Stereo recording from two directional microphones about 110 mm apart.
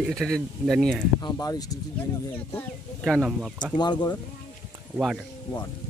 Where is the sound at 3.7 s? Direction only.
40° left (ahead or behind).